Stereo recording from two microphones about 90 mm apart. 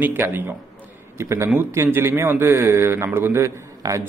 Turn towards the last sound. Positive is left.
turn(degrees=-40)  # may be behind; listen again after turning